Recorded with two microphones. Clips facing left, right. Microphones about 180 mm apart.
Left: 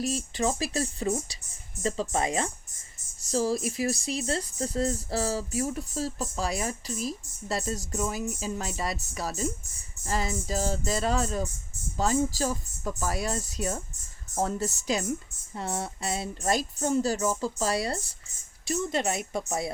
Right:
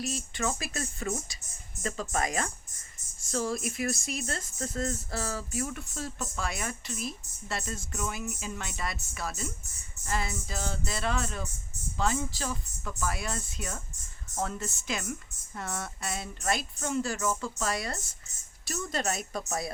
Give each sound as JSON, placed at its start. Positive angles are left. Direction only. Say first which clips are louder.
{"t": 0.0, "sound": "speech", "louder": "left 5 dB", "side_deg": 35}
{"t": 18.7, "sound": "speech", "louder": "left 4 dB", "side_deg": 20}